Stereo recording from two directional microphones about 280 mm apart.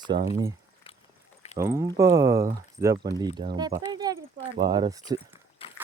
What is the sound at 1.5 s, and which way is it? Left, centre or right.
Speech, centre.